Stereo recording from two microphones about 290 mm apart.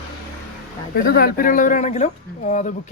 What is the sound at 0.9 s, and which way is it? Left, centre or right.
Speech, left.